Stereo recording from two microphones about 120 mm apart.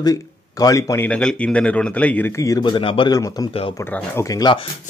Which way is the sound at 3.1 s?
35° left (ahead or behind).